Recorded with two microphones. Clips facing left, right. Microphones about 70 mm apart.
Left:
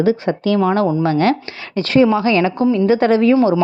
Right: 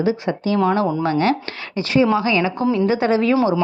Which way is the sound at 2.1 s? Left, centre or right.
Right.